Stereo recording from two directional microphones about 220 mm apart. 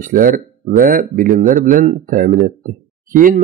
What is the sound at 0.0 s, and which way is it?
Speech, 40° right (ahead or behind).